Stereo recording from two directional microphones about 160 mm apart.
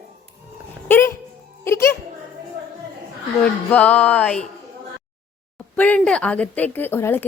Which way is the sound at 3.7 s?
10° left (ahead or behind).